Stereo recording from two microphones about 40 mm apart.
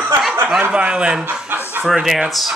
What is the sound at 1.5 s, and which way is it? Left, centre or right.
Chicken, right.